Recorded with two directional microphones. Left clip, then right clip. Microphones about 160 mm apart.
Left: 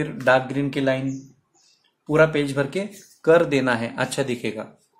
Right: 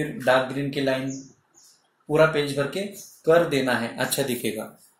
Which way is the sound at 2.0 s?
40° left (ahead or behind).